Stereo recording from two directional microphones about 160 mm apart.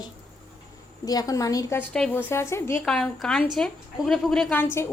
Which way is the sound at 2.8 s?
5° left (ahead or behind).